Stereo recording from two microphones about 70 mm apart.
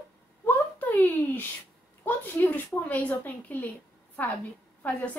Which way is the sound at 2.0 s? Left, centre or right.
Left.